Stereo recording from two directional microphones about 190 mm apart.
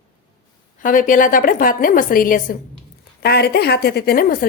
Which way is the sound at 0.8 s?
45° left (ahead or behind).